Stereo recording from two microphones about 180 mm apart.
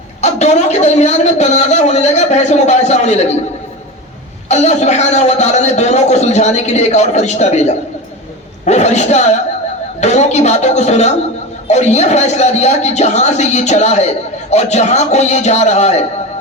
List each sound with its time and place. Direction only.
0.2 s a man's voice: 40° left (ahead or behind)
4.4 s a man's voice: 40° left (ahead or behind)